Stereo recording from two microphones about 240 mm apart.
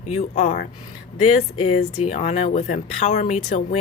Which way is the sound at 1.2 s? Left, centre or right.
Left.